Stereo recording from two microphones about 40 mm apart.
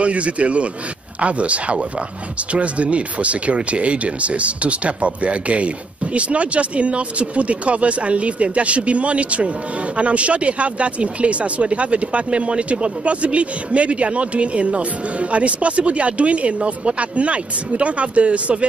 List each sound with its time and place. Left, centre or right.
0.0 s speech: right